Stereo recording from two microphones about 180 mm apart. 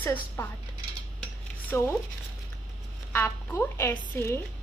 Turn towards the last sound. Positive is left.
turn(degrees=15)  # may be behind; listen again after turning